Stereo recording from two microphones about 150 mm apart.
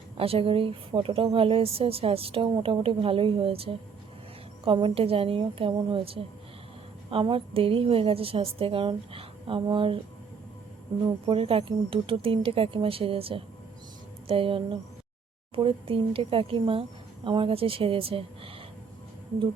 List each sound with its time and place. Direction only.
0.2 s a woman's voice: 40° right (ahead or behind)
11.0 s a woman's voice: 35° right (ahead or behind)